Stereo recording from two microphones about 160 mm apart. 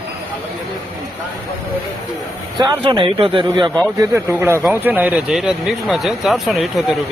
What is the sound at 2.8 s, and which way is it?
Speech, 30° right (ahead or behind).